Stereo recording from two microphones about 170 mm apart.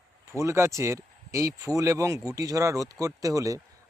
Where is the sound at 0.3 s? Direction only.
15° right (ahead or behind).